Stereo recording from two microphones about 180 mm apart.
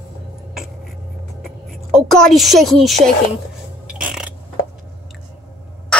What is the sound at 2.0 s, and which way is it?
A woman's voice, centre (ahead or behind).